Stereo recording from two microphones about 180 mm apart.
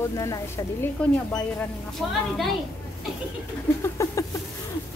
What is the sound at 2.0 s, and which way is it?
Speech, 5° left (ahead or behind).